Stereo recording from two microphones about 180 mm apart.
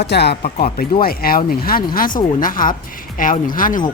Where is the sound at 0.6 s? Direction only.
55° left (ahead or behind).